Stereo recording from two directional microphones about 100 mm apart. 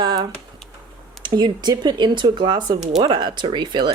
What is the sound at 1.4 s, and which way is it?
A woman's voice, 45° right (ahead or behind).